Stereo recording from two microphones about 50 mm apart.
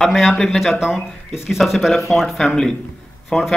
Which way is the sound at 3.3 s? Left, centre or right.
Centre.